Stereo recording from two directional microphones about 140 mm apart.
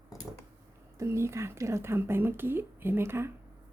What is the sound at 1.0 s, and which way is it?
Speech, 20° right (ahead or behind).